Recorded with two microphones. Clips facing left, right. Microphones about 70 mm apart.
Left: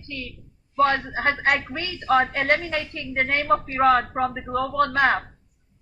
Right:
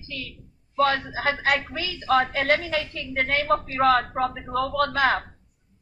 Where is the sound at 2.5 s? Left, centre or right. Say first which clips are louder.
Even; centre.